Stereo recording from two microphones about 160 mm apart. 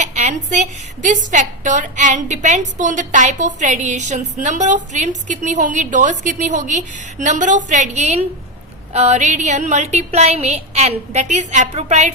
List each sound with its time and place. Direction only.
0.0 s a woman's voice: 45° right (ahead or behind)